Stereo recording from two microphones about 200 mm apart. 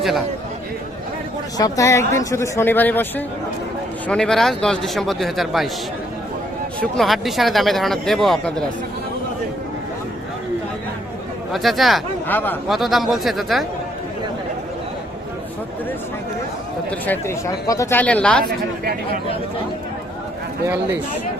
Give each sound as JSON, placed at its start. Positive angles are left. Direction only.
{"t": 1.5, "sound": "speech", "side_deg": 15}
{"t": 6.9, "sound": "speech", "side_deg": 0}
{"t": 11.5, "sound": "speech", "side_deg": 0}
{"t": 17.1, "sound": "speech", "side_deg": 15}
{"t": 18.4, "sound": "a man's voice", "side_deg": -50}